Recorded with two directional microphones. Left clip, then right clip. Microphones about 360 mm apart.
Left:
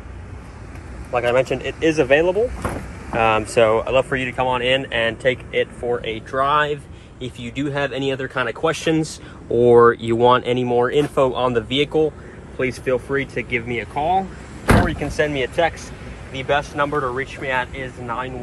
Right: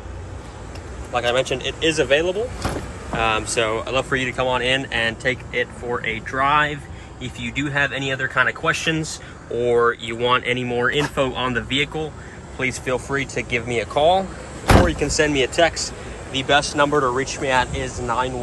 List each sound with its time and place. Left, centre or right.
1.1 s speech: centre
12.5 s speech: centre